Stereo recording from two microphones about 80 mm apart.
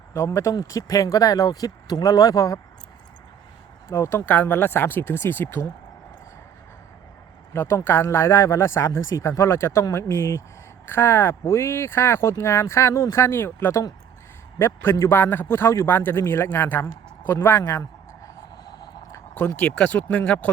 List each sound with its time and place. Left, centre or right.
0.1 s speech: left
3.8 s speech: left
4.3 s speech: left
7.5 s a woman's voice: left
18.5 s hum: left
19.5 s speech: centre